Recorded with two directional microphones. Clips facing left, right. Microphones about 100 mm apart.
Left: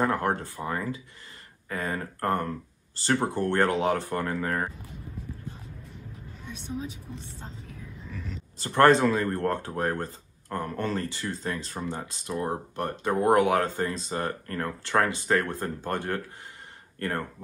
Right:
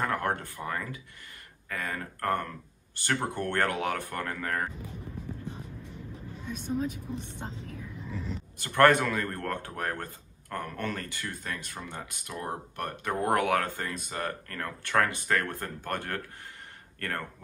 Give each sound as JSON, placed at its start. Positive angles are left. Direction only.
{"t": 0.0, "sound": "speech", "side_deg": 20}
{"t": 6.6, "sound": "a woman's voice", "side_deg": 0}
{"t": 6.9, "sound": "a woman's voice", "side_deg": -60}
{"t": 8.1, "sound": "speech", "side_deg": -20}
{"t": 8.5, "sound": "speech", "side_deg": 30}